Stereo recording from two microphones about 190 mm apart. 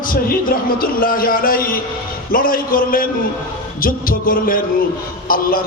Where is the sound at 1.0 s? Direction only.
50° left (ahead or behind).